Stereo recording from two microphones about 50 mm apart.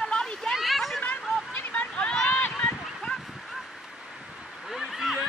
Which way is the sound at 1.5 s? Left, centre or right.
Left.